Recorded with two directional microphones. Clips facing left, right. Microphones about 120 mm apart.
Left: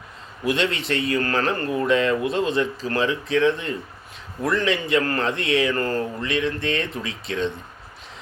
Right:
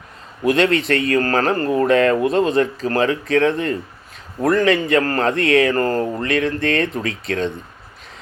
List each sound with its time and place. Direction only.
0.4 s speech: 50° right (ahead or behind)